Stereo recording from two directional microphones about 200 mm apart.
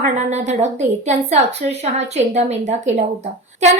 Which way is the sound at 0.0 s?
35° right (ahead or behind).